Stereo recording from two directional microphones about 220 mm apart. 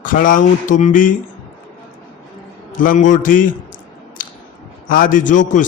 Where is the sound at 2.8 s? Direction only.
35° left (ahead or behind).